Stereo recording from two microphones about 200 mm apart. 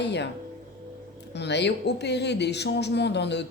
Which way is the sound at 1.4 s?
60° left (ahead or behind).